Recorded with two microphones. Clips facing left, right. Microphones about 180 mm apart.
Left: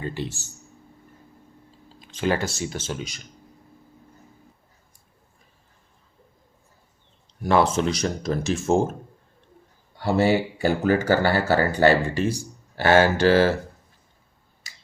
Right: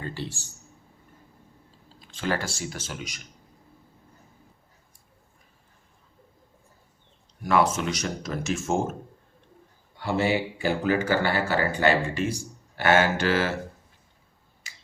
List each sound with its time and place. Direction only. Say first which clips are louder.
0.0 s speech: left 4 dB; 15° left (ahead or behind)
2.0 s speech: left 5 dB; 20° left (ahead or behind)
7.4 s speech: left 3 dB; 30° left (ahead or behind)
10.0 s speech: left 4 dB; 40° left (ahead or behind)